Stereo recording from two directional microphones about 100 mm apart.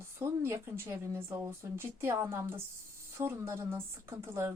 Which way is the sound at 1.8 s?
25° right (ahead or behind).